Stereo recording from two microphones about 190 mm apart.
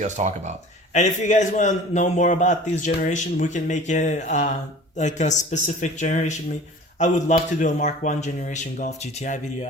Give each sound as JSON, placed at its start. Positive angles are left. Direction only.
{"t": 0.0, "sound": "speech", "side_deg": -40}
{"t": 0.9, "sound": "a man's voice", "side_deg": 40}